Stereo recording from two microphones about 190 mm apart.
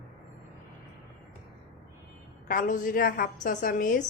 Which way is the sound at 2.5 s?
45° left (ahead or behind).